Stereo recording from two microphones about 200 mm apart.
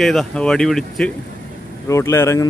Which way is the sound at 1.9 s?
15° left (ahead or behind).